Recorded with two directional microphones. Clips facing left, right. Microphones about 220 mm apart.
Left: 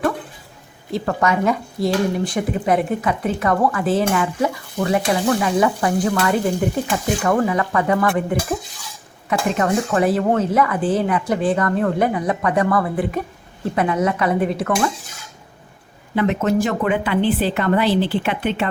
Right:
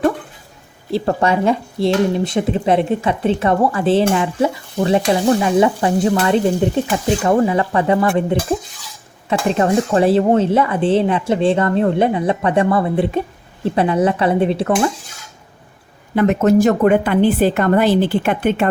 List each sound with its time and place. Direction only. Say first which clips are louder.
0.9 s speech: right 3 dB; 30° right (ahead or behind)
16.1 s a woman's voice: right 5 dB; 45° right (ahead or behind)